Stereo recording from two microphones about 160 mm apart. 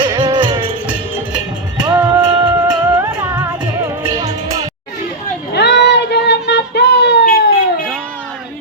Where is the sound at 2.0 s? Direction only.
25° right (ahead or behind).